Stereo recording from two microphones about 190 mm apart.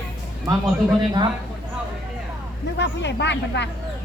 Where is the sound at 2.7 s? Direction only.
65° left (ahead or behind).